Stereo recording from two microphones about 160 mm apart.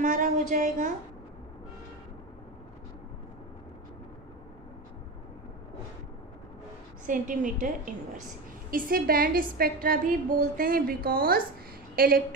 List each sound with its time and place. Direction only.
0.0 s a woman's voice: 55° right (ahead or behind)
7.1 s a woman's voice: 60° right (ahead or behind)